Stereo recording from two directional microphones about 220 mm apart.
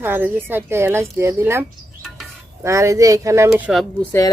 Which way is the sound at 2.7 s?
15° right (ahead or behind).